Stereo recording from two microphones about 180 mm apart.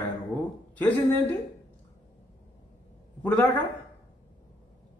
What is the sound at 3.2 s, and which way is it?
Speech, 10° left (ahead or behind).